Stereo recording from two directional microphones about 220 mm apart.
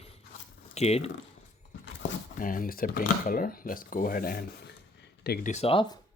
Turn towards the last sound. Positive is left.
turn(degrees=25)  # may be behind; listen again after turning